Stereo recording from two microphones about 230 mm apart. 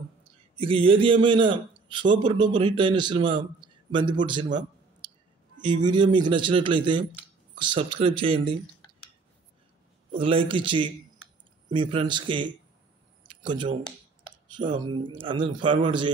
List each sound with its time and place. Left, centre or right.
0.6 s a man's voice: right
5.0 s a sound: right
5.6 s a man's voice: centre
10.1 s a man's voice: right
13.3 s a sound: centre
14.9 s a man's voice: right